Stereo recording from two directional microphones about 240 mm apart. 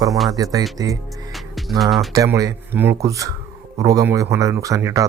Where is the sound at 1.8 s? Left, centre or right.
Centre.